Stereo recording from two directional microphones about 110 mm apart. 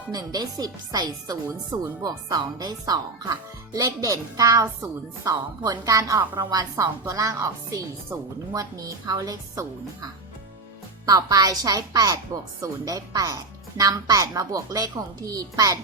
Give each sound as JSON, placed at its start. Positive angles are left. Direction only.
{"t": 0.1, "sound": "speech", "side_deg": -35}